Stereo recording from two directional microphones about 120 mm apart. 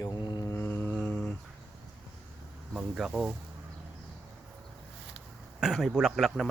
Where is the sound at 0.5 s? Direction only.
15° left (ahead or behind).